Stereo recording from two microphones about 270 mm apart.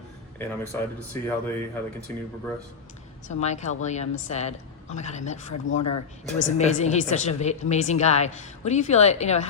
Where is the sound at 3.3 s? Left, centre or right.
Left.